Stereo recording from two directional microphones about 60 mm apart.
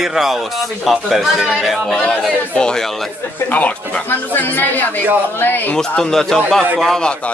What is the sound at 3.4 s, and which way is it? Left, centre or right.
Speech, left.